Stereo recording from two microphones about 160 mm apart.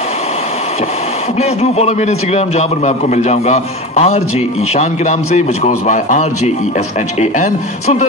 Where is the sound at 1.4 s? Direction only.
40° left (ahead or behind).